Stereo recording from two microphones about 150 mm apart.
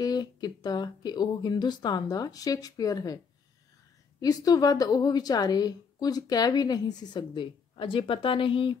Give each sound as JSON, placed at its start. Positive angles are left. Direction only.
{"t": 0.0, "sound": "a woman's voice", "side_deg": 25}
{"t": 4.2, "sound": "a woman's voice", "side_deg": 25}